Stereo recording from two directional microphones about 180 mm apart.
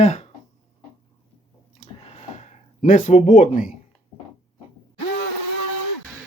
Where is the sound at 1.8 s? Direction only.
35° left (ahead or behind).